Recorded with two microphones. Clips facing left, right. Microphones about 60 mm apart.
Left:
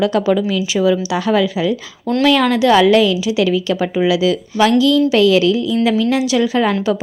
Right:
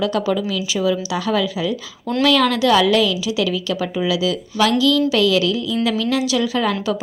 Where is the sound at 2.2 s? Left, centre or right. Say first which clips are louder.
Left 3 dB; left.